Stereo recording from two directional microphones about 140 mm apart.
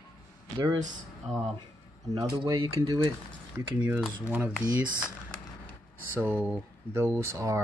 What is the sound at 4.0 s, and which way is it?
Cutlery, 10° right (ahead or behind).